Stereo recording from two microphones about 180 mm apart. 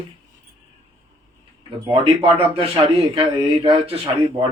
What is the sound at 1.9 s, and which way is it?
Speech, 30° right (ahead or behind).